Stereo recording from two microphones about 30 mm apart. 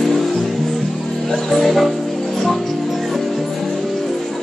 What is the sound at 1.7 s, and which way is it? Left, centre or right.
Music, centre.